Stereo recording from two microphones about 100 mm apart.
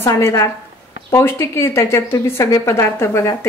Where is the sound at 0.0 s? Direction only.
30° left (ahead or behind).